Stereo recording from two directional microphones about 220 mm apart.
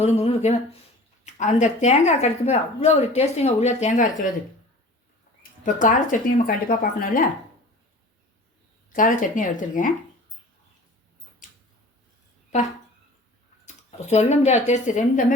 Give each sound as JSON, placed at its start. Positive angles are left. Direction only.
{"t": 0.0, "sound": "a woman's voice", "side_deg": 30}
{"t": 5.4, "sound": "a woman's voice", "side_deg": 35}
{"t": 8.9, "sound": "a woman's voice", "side_deg": 35}
{"t": 11.4, "sound": "a sound", "side_deg": 35}
{"t": 12.5, "sound": "a woman's voice", "side_deg": 30}